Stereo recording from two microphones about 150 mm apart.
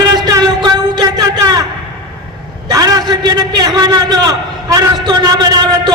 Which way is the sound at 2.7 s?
25° right (ahead or behind).